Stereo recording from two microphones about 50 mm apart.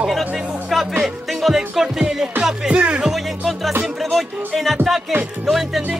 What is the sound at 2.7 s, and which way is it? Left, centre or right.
Music, right.